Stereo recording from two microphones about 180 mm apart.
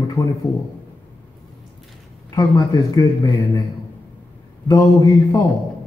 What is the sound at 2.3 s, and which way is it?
Speech, 20° left (ahead or behind).